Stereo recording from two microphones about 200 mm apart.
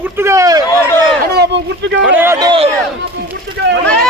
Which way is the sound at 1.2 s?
55° right (ahead or behind).